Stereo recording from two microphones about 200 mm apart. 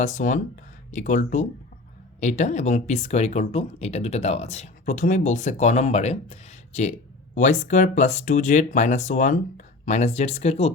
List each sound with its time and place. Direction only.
0.0 s speech: 40° left (ahead or behind)